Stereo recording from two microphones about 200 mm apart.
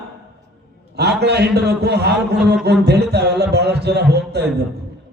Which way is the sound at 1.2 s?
55° right (ahead or behind).